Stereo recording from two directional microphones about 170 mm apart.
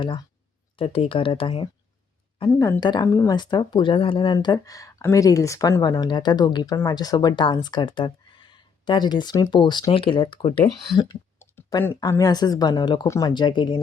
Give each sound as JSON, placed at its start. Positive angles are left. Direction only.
{"t": 0.8, "sound": "speech", "side_deg": 30}
{"t": 2.6, "sound": "speech", "side_deg": 20}